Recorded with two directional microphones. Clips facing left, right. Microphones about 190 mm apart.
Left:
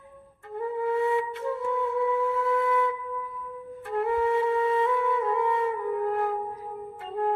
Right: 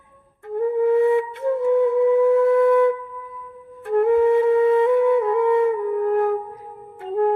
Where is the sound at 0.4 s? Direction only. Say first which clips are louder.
Right 9 dB; 50° right (ahead or behind).